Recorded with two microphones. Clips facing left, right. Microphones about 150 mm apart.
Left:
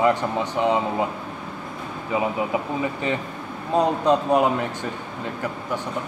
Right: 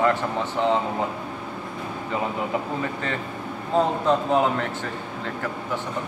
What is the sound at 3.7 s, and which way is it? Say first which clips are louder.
Speech: left 2 dB; 15° left (ahead or behind).